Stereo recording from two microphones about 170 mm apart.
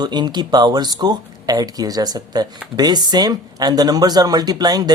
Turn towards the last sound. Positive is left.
turn(degrees=-25)  # may be behind; listen again after turning